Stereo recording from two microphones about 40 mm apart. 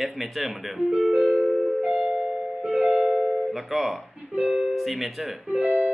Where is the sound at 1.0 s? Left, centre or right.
Centre.